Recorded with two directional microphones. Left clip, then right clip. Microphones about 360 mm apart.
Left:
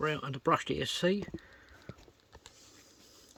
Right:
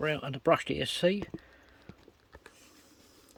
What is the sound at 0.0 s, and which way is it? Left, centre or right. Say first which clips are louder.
Speech: right 2 dB; centre.